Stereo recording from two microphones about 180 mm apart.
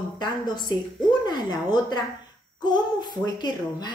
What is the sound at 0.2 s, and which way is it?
A woman's voice, 25° left (ahead or behind).